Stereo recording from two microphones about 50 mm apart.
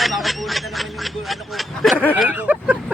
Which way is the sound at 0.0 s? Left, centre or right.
Centre.